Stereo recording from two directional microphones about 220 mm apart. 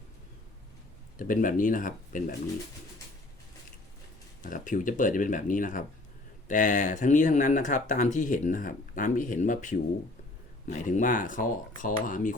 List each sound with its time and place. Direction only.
1.2 s speech: 40° left (ahead or behind)
4.4 s speech: 35° left (ahead or behind)